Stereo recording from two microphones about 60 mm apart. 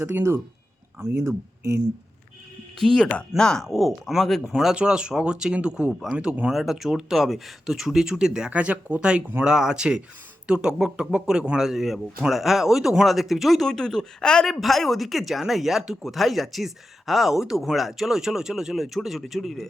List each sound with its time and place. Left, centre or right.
0.1 s speech: right
2.7 s speech: centre
4.5 s speech: centre
8.4 s speech: right; by 19.6 s centre